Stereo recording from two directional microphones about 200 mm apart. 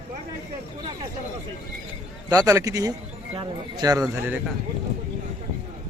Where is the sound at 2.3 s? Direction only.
15° right (ahead or behind).